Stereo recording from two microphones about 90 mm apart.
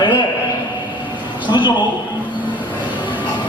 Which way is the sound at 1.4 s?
60° left (ahead or behind).